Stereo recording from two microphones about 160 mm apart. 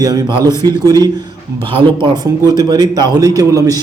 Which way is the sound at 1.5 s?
35° right (ahead or behind).